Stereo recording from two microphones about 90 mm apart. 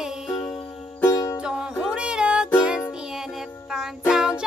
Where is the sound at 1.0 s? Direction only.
40° left (ahead or behind).